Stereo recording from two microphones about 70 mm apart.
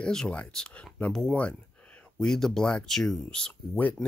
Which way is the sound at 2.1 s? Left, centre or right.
Centre.